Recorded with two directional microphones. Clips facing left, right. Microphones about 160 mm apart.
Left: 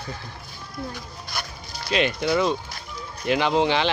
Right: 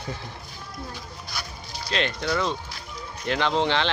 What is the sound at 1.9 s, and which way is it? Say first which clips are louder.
Speech: left 4 dB; 10° left (ahead or behind).